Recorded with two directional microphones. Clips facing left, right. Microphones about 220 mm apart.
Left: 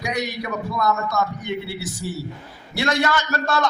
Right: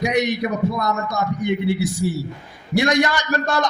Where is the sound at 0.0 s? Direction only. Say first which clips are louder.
Right 7 dB; 20° right (ahead or behind).